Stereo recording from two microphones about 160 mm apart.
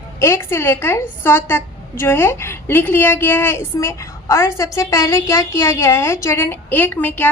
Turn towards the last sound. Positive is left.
turn(degrees=10)  # may be behind; listen again after turning